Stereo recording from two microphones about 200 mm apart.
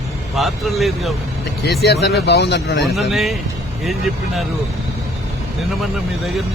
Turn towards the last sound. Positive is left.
turn(degrees=0)  # may be behind; listen again after turning